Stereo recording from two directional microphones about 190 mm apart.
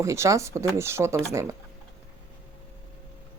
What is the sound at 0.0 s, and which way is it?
Speech, 15° right (ahead or behind).